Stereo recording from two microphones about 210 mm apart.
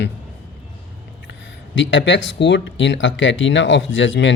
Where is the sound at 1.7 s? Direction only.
60° left (ahead or behind).